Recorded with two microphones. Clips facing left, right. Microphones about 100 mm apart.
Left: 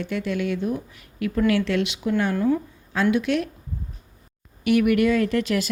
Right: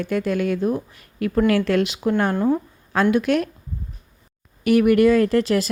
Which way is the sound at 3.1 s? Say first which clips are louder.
Right 3 dB; 50° right (ahead or behind).